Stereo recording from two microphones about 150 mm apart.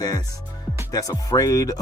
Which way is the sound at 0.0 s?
25° left (ahead or behind).